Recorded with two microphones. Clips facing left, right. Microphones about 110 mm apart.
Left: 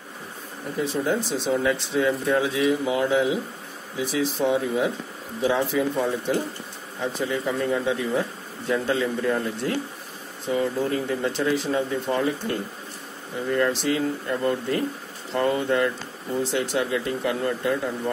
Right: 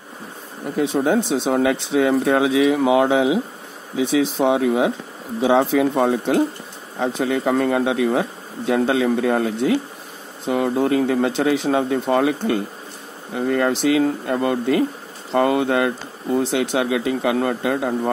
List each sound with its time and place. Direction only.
0.7 s speech: 80° right
1.5 s speech: 90° right
7.0 s speech: 90° right